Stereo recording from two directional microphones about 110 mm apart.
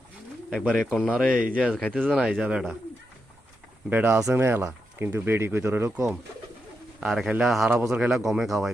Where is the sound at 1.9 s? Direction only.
5° left (ahead or behind).